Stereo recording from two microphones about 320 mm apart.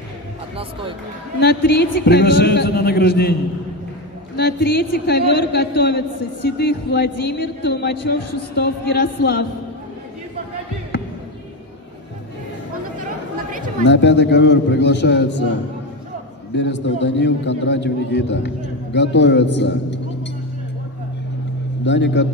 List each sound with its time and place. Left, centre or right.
0.6 s speech: centre
1.4 s a man's voice: left
4.4 s a man's voice: left
13.5 s chatter: right
13.8 s a man's voice: left
16.5 s a man's voice: left
21.8 s a man's voice: left